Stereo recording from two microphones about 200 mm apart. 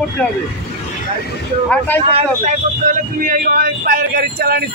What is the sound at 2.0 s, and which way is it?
Speech, 30° right (ahead or behind).